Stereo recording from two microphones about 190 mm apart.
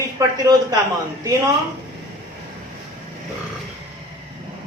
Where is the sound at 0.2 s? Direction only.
20° right (ahead or behind).